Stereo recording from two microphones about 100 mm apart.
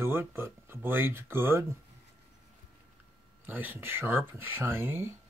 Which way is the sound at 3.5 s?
20° right (ahead or behind).